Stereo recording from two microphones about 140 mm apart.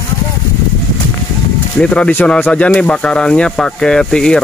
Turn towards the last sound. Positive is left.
turn(degrees=5)  # may be behind; listen again after turning